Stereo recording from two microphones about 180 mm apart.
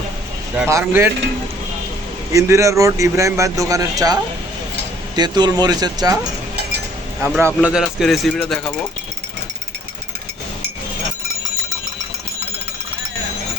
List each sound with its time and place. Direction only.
0.5 s a man's voice: 15° right (ahead or behind)
2.3 s a man's voice: 15° right (ahead or behind)
7.2 s speech: 10° right (ahead or behind)